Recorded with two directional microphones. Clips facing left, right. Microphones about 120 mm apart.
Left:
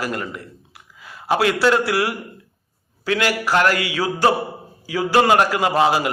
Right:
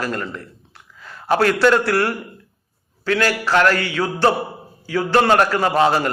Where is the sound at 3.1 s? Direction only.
15° left (ahead or behind).